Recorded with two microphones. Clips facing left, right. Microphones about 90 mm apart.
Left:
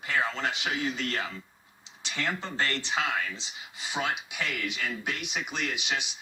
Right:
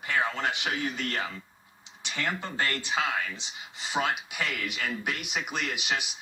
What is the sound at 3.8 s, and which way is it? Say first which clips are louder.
Speech: right 2 dB; centre (ahead or behind).